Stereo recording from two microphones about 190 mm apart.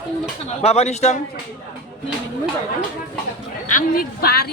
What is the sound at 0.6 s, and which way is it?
Speech, 35° left (ahead or behind).